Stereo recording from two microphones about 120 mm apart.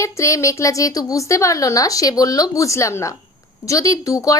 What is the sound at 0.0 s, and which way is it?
A woman's voice, 25° left (ahead or behind).